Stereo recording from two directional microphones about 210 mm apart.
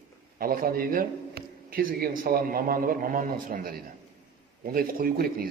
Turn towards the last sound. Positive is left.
turn(degrees=-45)  # may be behind; listen again after turning